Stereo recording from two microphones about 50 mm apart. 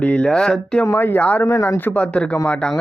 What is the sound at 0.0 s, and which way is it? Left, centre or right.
Speech, left.